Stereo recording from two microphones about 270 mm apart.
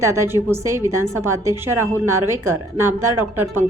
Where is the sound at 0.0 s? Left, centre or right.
Centre.